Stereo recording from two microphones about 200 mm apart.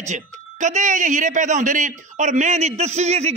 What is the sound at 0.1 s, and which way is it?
A man's voice, 35° right (ahead or behind).